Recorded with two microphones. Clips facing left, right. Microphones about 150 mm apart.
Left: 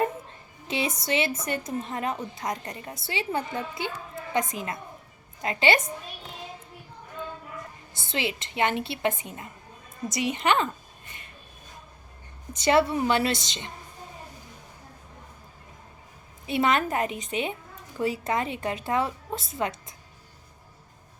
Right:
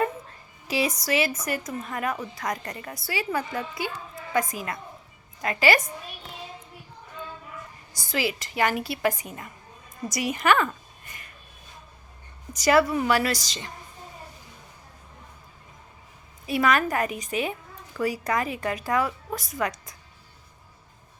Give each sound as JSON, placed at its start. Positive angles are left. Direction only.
{"t": 0.7, "sound": "speech", "side_deg": 25}
{"t": 7.9, "sound": "a woman's voice", "side_deg": 25}
{"t": 12.5, "sound": "speech", "side_deg": 25}
{"t": 16.5, "sound": "speech", "side_deg": 25}